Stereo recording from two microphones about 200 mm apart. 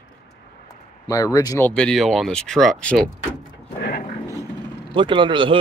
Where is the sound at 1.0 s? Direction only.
15° left (ahead or behind).